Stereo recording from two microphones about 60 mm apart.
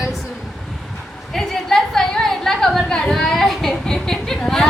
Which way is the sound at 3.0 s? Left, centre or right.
Centre.